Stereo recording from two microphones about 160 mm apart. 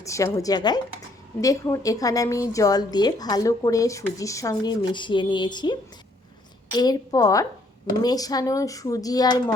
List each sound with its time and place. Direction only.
0.0 s a woman's voice: 20° left (ahead or behind)
6.7 s a woman's voice: 25° left (ahead or behind)